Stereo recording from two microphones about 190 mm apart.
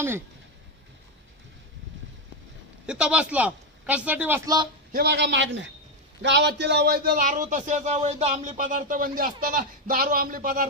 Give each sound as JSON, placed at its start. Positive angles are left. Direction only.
{"t": 2.8, "sound": "a man's voice", "side_deg": -5}
{"t": 4.9, "sound": "a man's voice", "side_deg": -55}